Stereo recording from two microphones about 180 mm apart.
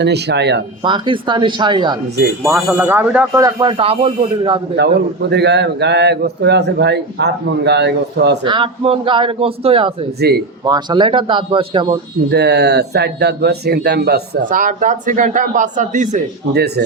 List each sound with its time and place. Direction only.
0.0 s a man's voice: 70° right (ahead or behind)
0.9 s a man's voice: 25° right (ahead or behind)
2.6 s speech: 10° right (ahead or behind)
3.4 s a man's voice: 25° right (ahead or behind)
4.8 s a man's voice: 70° right (ahead or behind)
8.4 s a man's voice: 30° right (ahead or behind)
10.2 s speech: 65° right (ahead or behind)
10.7 s a man's voice: 25° right (ahead or behind)
12.3 s speech: 65° right (ahead or behind); by 16.2 s 45° right (ahead or behind)
16.5 s speech: 65° right (ahead or behind)